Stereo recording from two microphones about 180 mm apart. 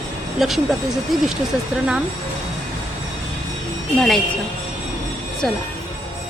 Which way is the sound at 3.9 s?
Centre (ahead or behind).